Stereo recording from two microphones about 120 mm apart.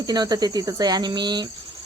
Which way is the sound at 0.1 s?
35° right (ahead or behind).